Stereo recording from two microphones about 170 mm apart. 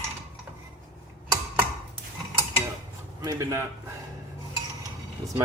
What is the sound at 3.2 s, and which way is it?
Speech, 20° right (ahead or behind).